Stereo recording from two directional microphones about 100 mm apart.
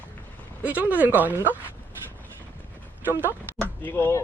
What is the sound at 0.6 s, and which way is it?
Speech, 15° right (ahead or behind).